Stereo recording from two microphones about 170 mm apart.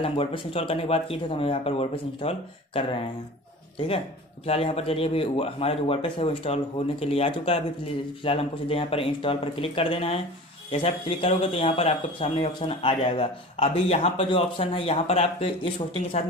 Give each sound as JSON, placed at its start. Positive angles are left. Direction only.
{"t": 0.0, "sound": "speech", "side_deg": 35}